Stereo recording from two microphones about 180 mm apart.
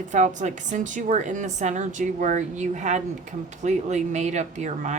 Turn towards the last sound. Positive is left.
turn(degrees=-40)  # may be behind; listen again after turning